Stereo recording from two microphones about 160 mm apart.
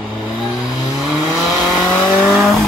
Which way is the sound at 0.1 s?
Centre (ahead or behind).